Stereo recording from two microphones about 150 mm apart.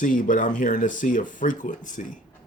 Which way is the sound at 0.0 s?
60° left (ahead or behind).